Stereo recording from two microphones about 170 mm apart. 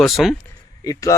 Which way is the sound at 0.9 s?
20° left (ahead or behind).